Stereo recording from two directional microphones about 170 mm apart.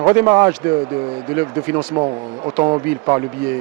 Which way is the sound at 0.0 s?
15° right (ahead or behind).